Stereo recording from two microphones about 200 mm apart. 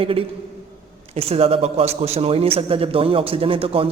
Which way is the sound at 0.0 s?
30° right (ahead or behind).